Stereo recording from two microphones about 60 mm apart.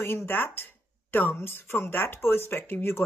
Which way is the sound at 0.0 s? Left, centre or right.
Left.